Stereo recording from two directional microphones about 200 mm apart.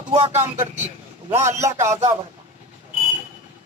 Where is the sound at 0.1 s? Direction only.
30° right (ahead or behind).